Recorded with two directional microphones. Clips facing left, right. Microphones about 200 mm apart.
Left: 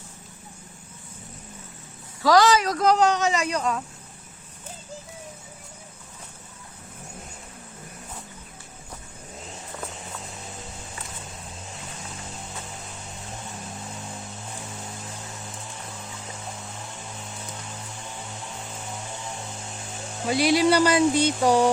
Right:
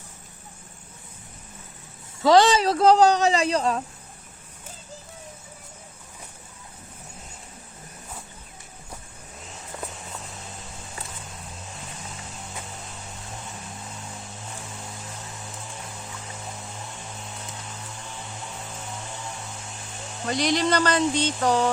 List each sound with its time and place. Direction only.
2.2 s speech: 25° right (ahead or behind)
20.2 s speech: 5° left (ahead or behind)